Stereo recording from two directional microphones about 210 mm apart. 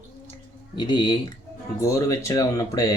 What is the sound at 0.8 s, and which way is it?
Speech, 20° left (ahead or behind).